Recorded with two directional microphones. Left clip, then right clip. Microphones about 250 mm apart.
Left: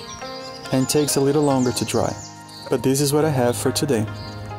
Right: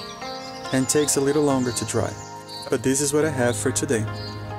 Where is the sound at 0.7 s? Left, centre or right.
Centre.